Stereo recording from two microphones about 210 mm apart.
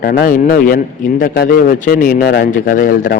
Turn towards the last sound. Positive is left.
turn(degrees=40)  # may be behind; listen again after turning